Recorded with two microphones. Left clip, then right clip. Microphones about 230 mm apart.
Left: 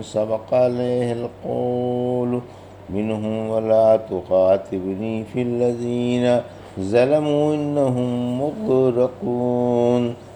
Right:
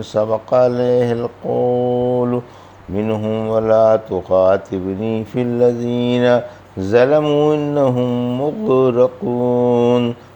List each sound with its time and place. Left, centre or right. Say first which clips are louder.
0.0 s a man's voice: right 5 dB; right